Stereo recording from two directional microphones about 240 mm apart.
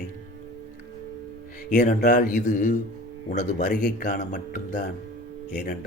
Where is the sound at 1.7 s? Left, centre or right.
Left.